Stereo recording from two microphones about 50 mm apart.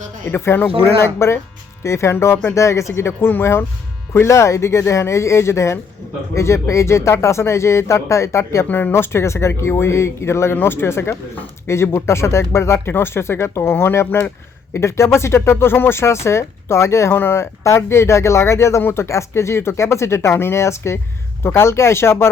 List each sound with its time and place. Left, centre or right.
0.3 s speech: left
1.0 s speech: left
2.6 s speech: left
8.9 s speech: left
10.5 s speech: left
12.9 s speech: left
17.1 s speech: left
18.9 s speech: left
21.4 s speech: left